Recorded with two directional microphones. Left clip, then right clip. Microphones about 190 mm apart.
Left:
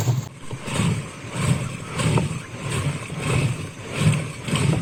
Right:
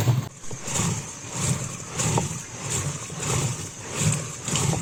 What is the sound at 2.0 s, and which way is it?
Vehicle, 15° right (ahead or behind).